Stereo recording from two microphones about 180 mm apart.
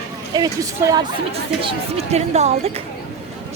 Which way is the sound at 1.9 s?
35° right (ahead or behind).